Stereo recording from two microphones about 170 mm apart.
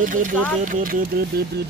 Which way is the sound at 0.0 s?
50° right (ahead or behind).